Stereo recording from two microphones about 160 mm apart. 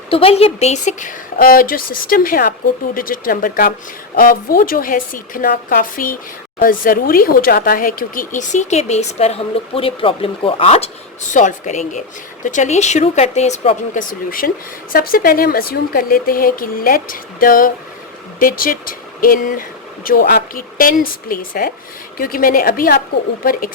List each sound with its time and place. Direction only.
0.1 s speech: 35° left (ahead or behind)
11.3 s speech: 50° left (ahead or behind)
14.3 s speech: 65° left (ahead or behind)